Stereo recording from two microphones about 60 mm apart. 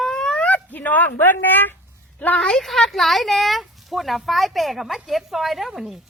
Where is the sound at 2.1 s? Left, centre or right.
Left.